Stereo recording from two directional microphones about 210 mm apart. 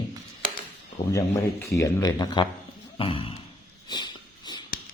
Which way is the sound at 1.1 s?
15° left (ahead or behind).